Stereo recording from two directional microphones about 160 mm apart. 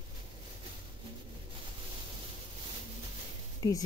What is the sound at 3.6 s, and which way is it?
Speech, 20° left (ahead or behind).